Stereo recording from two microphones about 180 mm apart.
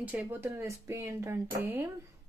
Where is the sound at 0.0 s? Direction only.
10° right (ahead or behind).